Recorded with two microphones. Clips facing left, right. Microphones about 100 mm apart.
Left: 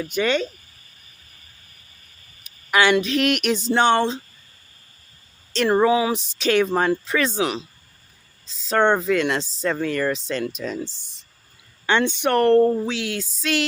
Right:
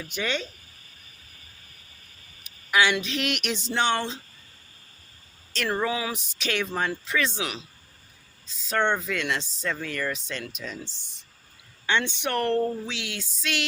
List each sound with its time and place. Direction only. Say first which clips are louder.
0.1 s speech: left 8 dB; 50° left (ahead or behind)
2.4 s speech: left 4 dB; 55° left (ahead or behind); by 4.2 s 30° left (ahead or behind)
5.8 s speech: left 10 dB; 25° left (ahead or behind)
11.9 s speech: left 7 dB; 45° left (ahead or behind)